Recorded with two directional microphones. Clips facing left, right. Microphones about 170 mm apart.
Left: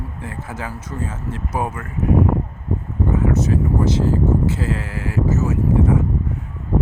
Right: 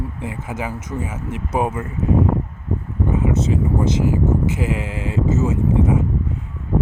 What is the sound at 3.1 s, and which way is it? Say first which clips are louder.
Speech: left 1 dB; 15° right (ahead or behind).